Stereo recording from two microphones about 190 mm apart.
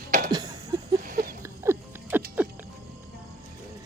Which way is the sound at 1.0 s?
45° right (ahead or behind).